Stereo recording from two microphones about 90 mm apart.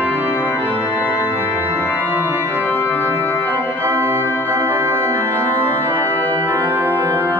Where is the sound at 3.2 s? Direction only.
20° left (ahead or behind).